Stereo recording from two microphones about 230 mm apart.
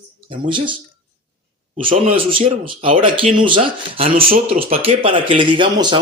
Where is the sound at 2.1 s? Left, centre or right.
Right.